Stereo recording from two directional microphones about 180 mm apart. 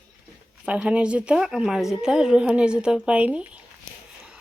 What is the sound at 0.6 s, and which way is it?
Speech, 5° right (ahead or behind).